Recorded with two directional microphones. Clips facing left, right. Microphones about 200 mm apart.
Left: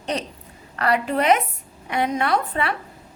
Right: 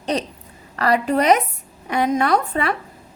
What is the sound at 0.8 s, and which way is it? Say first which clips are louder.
A woman's voice: right 3 dB; 35° right (ahead or behind).